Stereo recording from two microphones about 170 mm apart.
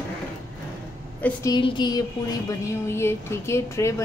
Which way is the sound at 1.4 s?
25° left (ahead or behind).